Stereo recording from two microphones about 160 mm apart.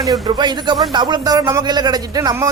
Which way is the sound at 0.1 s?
30° right (ahead or behind).